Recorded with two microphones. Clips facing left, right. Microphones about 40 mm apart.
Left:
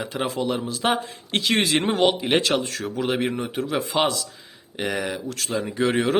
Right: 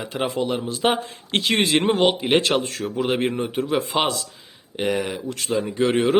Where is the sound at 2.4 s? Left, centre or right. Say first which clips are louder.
Right 1 dB; right.